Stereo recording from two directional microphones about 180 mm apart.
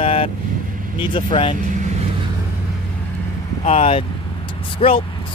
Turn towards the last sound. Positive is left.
turn(degrees=30)  # may be behind; listen again after turning